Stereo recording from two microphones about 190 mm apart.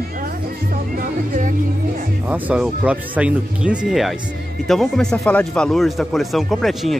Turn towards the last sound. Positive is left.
turn(degrees=0)  # may be behind; listen again after turning